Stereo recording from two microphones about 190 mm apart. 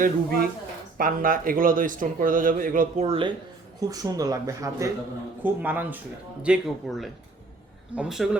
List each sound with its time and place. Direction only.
0.0 s a man's voice: 50° right (ahead or behind)
3.1 s speech: 25° right (ahead or behind); by 8.4 s centre (ahead or behind)